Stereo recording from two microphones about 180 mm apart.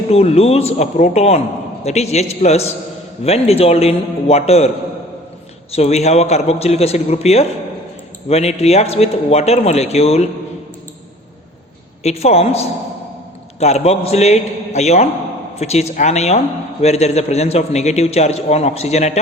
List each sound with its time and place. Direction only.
0.1 s a man's voice: 35° left (ahead or behind)
5.7 s a man's voice: 35° left (ahead or behind)
12.0 s a man's voice: 35° left (ahead or behind)